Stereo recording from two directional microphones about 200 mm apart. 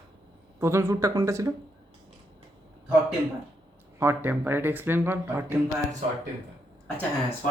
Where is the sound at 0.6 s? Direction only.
15° right (ahead or behind).